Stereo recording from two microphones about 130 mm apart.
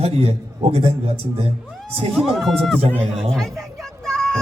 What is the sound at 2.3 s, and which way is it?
Speech, centre (ahead or behind).